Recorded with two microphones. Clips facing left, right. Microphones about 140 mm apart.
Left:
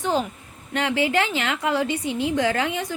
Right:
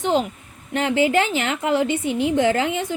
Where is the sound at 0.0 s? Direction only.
25° right (ahead or behind).